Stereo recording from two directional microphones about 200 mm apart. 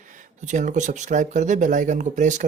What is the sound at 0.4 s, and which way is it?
Speech, 40° right (ahead or behind).